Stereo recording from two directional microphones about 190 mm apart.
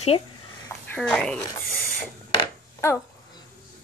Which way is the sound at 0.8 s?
5° left (ahead or behind).